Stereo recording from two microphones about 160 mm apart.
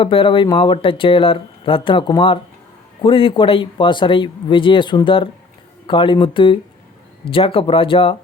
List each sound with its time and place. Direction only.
0.0 s speech: 35° left (ahead or behind)